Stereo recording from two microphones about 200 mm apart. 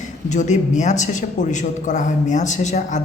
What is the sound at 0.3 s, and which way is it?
A woman's voice, 35° left (ahead or behind).